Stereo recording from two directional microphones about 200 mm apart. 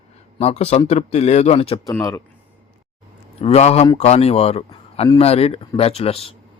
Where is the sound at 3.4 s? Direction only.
30° left (ahead or behind).